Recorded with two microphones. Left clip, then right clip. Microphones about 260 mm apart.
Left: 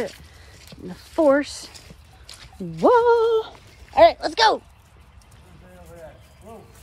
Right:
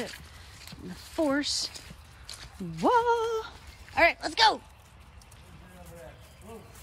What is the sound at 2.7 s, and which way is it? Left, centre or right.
Speech, left.